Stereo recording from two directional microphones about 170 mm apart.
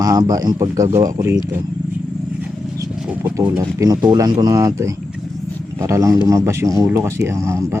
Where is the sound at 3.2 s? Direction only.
15° right (ahead or behind).